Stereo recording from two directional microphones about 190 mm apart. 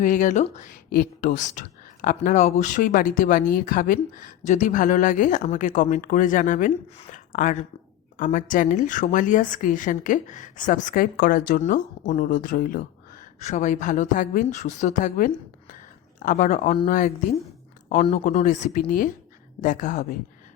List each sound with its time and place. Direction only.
0.0 s a woman's voice: 40° left (ahead or behind)